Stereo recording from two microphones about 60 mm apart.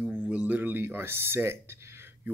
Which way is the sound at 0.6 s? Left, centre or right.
Right.